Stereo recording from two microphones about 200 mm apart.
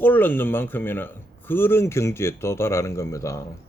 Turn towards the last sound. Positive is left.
turn(degrees=15)  # may be behind; listen again after turning